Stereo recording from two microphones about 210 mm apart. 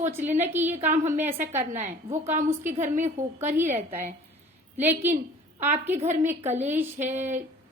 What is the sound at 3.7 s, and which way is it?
Speech, 35° right (ahead or behind).